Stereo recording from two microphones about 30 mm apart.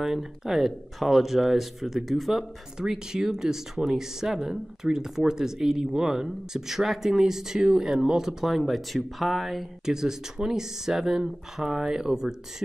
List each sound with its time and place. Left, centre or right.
0.2 s speech: centre
2.8 s speech: centre
8.5 s speech: centre
9.8 s speech: centre